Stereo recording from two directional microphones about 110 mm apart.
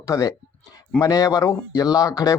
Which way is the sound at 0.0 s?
35° left (ahead or behind).